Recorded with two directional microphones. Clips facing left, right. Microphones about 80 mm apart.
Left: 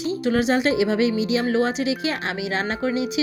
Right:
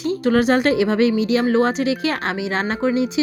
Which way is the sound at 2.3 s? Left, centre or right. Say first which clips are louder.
Right 3 dB; right.